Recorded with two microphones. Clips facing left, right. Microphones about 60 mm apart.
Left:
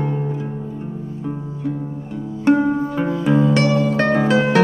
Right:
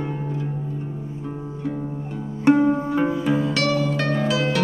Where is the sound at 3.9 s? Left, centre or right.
Left.